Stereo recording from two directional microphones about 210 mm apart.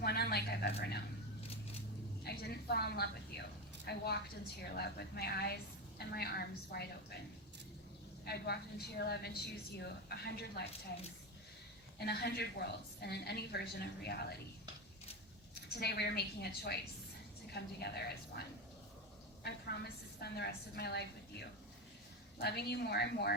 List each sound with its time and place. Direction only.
0.0 s a sound: 50° left (ahead or behind)
0.8 s a woman's voice: 50° left (ahead or behind)
2.2 s a woman's voice: 50° left (ahead or behind)
8.2 s a woman's voice: 50° left (ahead or behind)
11.9 s a woman's voice: 50° left (ahead or behind)
15.8 s a woman's voice: 50° left (ahead or behind)